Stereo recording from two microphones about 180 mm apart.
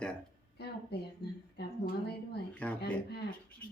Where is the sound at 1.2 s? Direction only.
65° left (ahead or behind).